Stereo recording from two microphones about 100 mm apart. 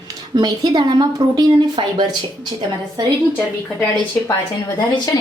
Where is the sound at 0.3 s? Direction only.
45° right (ahead or behind).